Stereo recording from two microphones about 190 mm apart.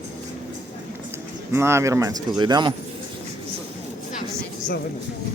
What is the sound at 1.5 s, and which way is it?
Speech, 15° right (ahead or behind).